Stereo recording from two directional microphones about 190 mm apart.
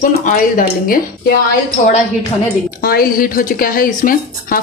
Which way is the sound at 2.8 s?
50° left (ahead or behind).